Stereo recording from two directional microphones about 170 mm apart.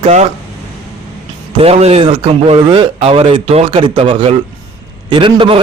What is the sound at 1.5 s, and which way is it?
A man's voice, 35° right (ahead or behind).